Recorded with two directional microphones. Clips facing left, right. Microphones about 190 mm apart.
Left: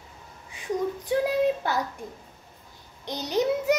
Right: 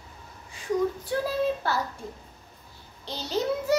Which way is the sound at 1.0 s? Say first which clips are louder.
Left 3 dB; 15° left (ahead or behind).